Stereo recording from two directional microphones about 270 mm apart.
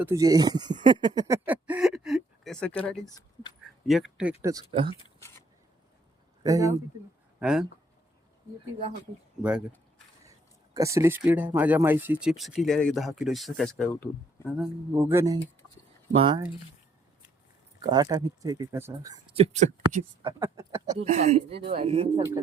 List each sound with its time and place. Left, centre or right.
0.0 s speech: centre
4.9 s a sound: centre
6.4 s a man's voice: centre
9.4 s speech: centre
10.8 s speech: centre
14.5 s speech: centre
17.7 s speech: centre
20.4 s speech: centre
20.9 s speech: right